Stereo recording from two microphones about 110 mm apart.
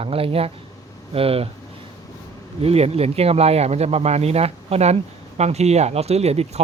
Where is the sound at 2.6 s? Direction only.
65° right (ahead or behind).